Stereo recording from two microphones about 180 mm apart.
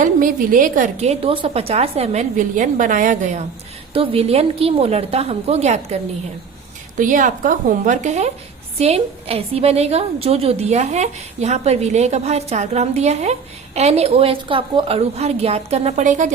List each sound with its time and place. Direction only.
0.0 s a woman's voice: 50° right (ahead or behind)
3.9 s a woman's voice: 30° right (ahead or behind)
7.0 s a woman's voice: 45° right (ahead or behind)